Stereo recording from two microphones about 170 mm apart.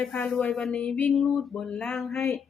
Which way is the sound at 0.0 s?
5° left (ahead or behind).